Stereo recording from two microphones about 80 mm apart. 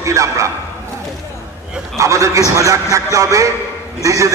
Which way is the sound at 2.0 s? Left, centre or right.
Right.